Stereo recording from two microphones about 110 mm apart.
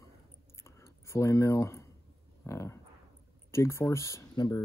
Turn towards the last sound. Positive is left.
turn(degrees=40)  # may be behind; listen again after turning